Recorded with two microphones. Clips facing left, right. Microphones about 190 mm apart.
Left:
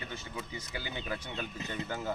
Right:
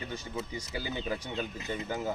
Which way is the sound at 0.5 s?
40° right (ahead or behind).